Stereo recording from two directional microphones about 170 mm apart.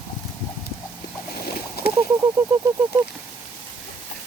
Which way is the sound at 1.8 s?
65° left (ahead or behind).